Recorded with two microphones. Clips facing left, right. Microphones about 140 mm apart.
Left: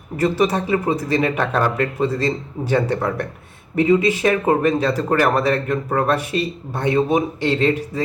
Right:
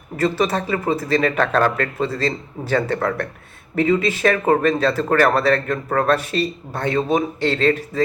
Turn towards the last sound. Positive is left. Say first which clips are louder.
# even
turn(degrees=15)  # may be behind; listen again after turning